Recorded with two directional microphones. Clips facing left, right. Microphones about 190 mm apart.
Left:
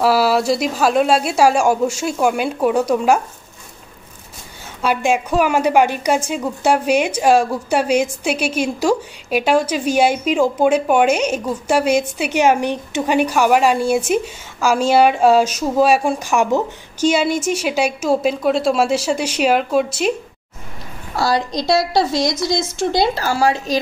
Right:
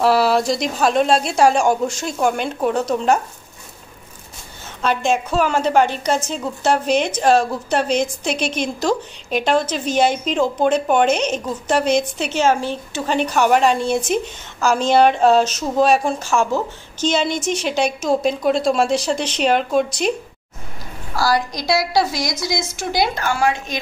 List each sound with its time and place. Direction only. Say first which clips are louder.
0.0 s a woman's voice: left 1 dB; 5° left (ahead or behind)
4.8 s a woman's voice: left 1 dB; 10° left (ahead or behind)
21.2 s a woman's voice: left 1 dB; 25° left (ahead or behind)